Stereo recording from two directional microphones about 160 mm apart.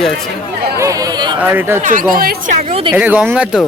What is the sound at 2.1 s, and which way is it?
Speech, 65° right (ahead or behind).